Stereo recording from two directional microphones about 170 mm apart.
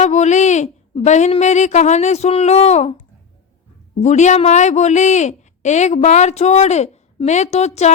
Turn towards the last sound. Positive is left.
turn(degrees=40)  # may be behind; listen again after turning